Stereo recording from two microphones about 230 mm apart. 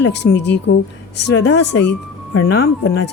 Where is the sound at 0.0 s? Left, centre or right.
Left.